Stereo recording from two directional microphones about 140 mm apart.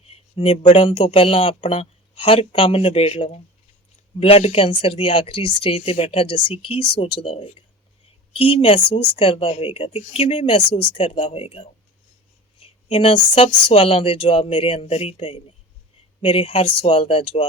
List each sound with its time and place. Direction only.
0.1 s speech: 45° left (ahead or behind)